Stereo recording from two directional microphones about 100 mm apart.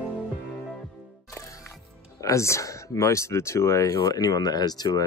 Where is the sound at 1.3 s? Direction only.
30° left (ahead or behind).